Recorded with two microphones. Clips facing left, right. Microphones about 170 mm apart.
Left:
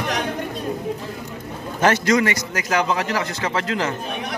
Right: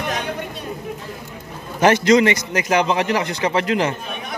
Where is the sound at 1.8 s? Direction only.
20° right (ahead or behind).